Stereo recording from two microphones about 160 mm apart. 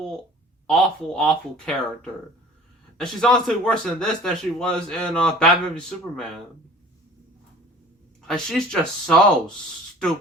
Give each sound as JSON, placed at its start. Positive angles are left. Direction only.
{"t": 0.7, "sound": "a man's voice", "side_deg": 5}
{"t": 8.3, "sound": "a man's voice", "side_deg": 5}